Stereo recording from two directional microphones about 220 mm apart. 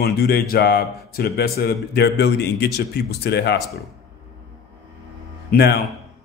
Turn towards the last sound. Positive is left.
turn(degrees=45)  # may be behind; listen again after turning